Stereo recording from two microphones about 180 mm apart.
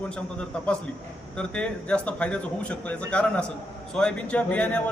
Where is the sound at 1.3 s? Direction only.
5° left (ahead or behind).